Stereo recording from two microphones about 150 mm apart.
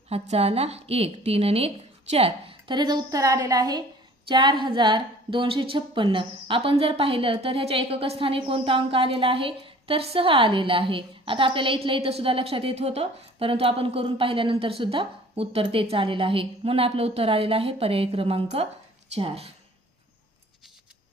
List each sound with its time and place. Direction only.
0.1 s a woman's voice: 45° right (ahead or behind)